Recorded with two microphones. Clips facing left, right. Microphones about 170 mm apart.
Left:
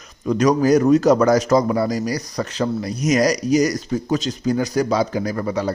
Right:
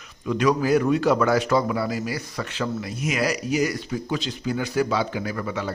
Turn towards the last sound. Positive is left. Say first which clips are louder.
# left 6 dB
turn(degrees=40)  # may be behind; listen again after turning